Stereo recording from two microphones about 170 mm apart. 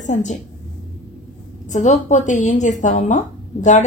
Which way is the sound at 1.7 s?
45° left (ahead or behind).